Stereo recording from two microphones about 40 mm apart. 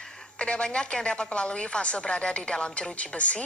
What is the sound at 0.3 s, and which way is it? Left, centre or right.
A woman's voice, left.